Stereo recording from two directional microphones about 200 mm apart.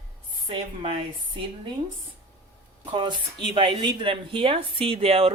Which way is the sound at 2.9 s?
25° right (ahead or behind).